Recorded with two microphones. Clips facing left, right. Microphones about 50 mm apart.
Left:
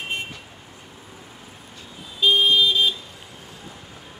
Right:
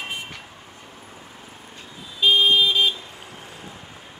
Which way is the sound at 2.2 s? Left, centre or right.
Right.